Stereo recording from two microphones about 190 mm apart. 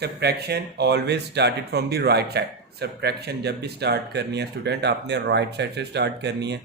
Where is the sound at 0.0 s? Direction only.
60° right (ahead or behind).